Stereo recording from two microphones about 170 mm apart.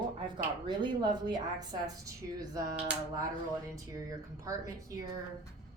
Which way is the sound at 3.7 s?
20° right (ahead or behind).